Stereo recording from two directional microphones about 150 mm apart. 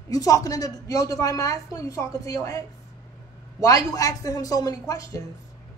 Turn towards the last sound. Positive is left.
turn(degrees=20)  # may be behind; listen again after turning